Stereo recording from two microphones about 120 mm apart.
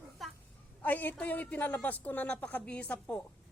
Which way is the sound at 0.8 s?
15° left (ahead or behind).